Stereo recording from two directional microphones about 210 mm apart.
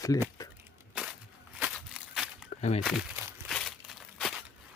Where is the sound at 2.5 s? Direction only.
30° left (ahead or behind).